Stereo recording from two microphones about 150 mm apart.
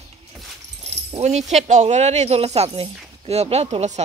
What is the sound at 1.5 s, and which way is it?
Speech, 50° right (ahead or behind).